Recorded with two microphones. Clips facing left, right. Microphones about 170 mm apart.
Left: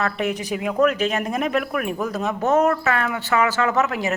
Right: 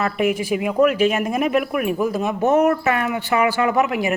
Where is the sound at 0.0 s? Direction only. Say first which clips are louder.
Right 4 dB; 10° right (ahead or behind).